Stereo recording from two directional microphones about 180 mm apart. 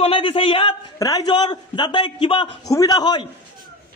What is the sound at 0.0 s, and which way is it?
A man's voice, 30° left (ahead or behind).